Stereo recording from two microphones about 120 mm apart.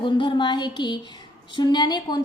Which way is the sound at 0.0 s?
45° left (ahead or behind).